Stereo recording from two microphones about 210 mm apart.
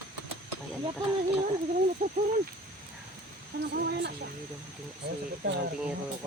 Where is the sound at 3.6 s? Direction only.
50° right (ahead or behind).